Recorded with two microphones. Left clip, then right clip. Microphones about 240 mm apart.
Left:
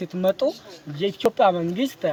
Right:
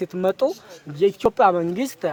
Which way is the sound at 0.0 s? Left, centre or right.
Right.